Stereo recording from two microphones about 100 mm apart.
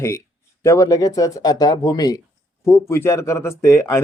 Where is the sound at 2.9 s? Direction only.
25° left (ahead or behind).